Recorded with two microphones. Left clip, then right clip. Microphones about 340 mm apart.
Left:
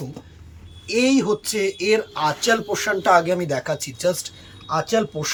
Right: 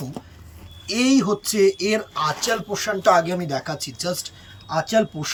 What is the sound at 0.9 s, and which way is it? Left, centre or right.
Speech, centre.